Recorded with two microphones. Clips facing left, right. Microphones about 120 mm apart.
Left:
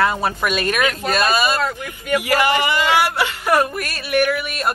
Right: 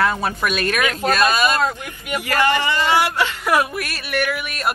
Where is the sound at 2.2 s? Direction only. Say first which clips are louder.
Right 1 dB; 15° left (ahead or behind).